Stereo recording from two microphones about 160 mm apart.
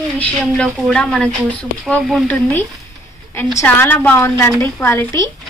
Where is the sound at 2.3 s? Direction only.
10° left (ahead or behind).